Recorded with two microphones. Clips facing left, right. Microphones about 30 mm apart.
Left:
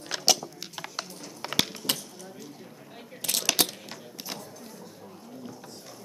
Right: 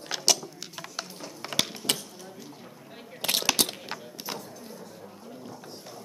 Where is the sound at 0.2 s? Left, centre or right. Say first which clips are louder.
Left 1 dB; centre.